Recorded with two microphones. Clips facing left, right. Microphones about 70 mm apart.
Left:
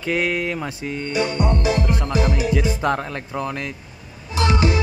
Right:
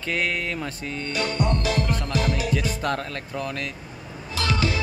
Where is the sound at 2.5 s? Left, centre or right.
Left.